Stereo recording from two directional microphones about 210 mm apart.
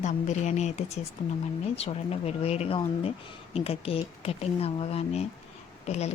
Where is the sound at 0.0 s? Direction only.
35° left (ahead or behind).